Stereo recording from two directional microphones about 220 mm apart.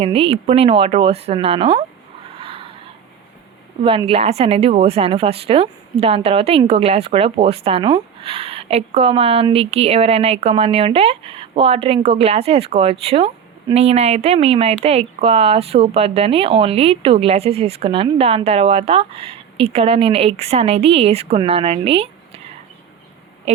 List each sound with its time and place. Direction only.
0.0 s speech: 25° right (ahead or behind)
2.4 s a sound: 25° right (ahead or behind)
3.8 s speech: 25° right (ahead or behind)